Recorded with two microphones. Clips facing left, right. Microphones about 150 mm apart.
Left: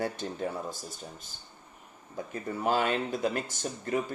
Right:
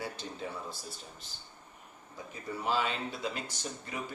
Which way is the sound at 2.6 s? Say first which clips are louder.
Left 5 dB; 50° left (ahead or behind).